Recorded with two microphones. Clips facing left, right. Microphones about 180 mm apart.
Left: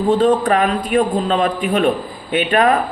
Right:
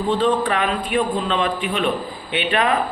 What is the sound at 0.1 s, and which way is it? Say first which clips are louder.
A man's voice: left 5 dB; 40° left (ahead or behind).